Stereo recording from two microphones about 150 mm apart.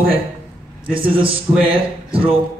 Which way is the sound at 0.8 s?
35° right (ahead or behind).